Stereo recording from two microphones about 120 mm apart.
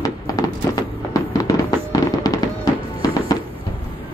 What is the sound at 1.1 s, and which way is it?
Music, 30° left (ahead or behind).